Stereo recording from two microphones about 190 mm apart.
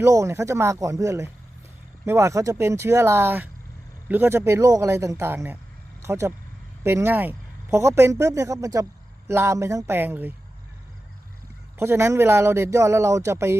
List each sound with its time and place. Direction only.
0.0 s speech: 15° right (ahead or behind)
11.8 s speech: 15° right (ahead or behind)